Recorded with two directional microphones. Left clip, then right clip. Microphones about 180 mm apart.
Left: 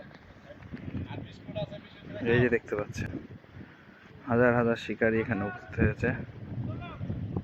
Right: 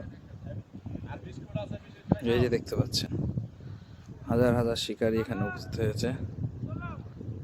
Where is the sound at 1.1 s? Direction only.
20° right (ahead or behind).